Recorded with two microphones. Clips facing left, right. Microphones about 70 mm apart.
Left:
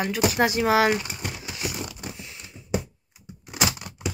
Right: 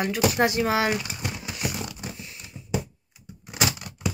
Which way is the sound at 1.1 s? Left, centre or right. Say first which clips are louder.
Right 1 dB; centre.